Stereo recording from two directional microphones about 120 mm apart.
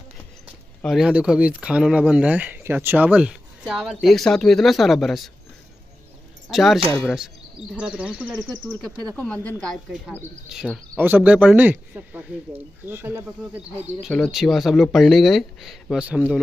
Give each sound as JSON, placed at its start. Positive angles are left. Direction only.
{"t": 0.8, "sound": "speech", "side_deg": -5}
{"t": 6.5, "sound": "speech", "side_deg": 0}
{"t": 8.5, "sound": "speech", "side_deg": 10}
{"t": 10.5, "sound": "speech", "side_deg": 0}
{"t": 11.0, "sound": "speech", "side_deg": -15}
{"t": 14.0, "sound": "speech", "side_deg": 0}